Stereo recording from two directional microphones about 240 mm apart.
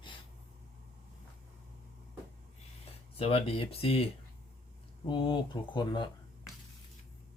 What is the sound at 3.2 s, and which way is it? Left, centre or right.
Speech, left.